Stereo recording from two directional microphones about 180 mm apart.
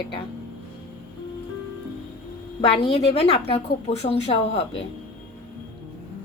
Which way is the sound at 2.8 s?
30° left (ahead or behind).